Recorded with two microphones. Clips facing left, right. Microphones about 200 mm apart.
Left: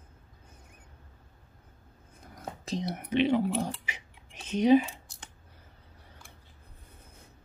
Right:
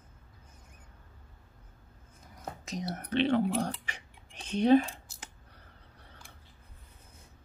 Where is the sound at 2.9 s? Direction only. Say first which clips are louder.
Left 2 dB; 10° left (ahead or behind).